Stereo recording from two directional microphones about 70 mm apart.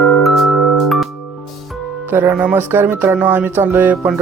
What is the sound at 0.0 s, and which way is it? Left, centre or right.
Music, centre.